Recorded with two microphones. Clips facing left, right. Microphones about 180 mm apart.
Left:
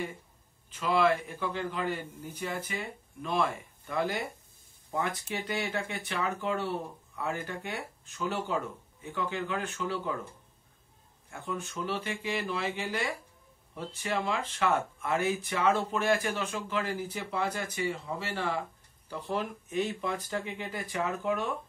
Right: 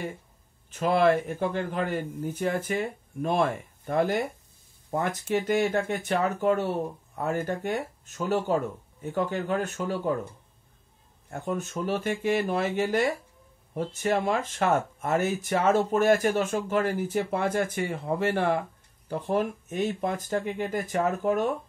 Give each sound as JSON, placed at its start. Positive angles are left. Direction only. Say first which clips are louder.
{"t": 0.7, "sound": "speech", "louder": "right 4 dB", "side_deg": -45}
{"t": 11.2, "sound": "speech", "louder": "right 6 dB", "side_deg": -40}